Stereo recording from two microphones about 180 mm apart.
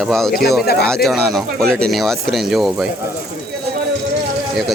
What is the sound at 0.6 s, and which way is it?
Speech, 60° left (ahead or behind).